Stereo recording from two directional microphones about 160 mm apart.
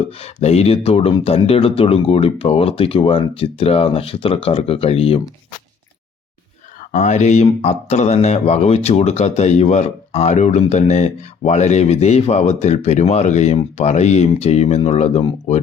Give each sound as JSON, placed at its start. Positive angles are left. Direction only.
{"t": 0.2, "sound": "speech", "side_deg": 40}
{"t": 6.9, "sound": "speech", "side_deg": 50}